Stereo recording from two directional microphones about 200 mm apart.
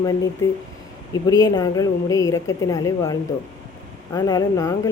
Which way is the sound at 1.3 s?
20° left (ahead or behind).